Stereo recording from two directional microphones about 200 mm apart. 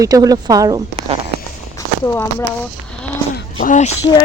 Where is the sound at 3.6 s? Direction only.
40° left (ahead or behind).